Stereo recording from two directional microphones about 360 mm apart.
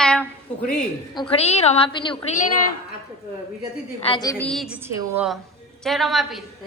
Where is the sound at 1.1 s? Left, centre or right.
Centre.